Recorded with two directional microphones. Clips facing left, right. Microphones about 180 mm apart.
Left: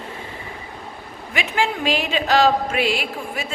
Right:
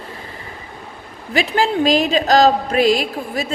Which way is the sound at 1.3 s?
35° right (ahead or behind).